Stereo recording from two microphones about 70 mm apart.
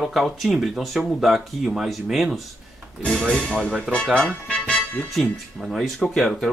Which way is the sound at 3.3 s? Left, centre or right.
Centre.